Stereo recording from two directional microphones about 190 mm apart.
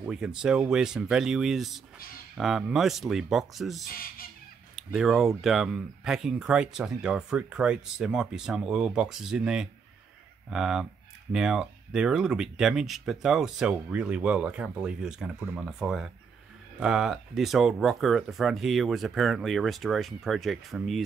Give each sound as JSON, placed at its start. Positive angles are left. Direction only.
{"t": 0.0, "sound": "speech", "side_deg": -5}
{"t": 3.9, "sound": "speech", "side_deg": 50}
{"t": 4.7, "sound": "speech", "side_deg": 0}